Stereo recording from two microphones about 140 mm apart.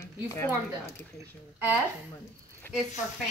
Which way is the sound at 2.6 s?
15° left (ahead or behind).